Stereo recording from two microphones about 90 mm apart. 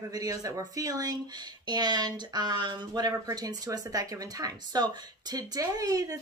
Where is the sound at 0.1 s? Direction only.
45° right (ahead or behind).